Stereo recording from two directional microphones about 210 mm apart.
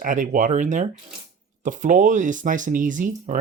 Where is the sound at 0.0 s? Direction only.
40° right (ahead or behind).